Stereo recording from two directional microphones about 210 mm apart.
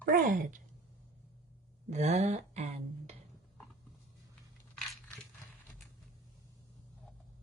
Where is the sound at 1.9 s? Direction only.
30° right (ahead or behind).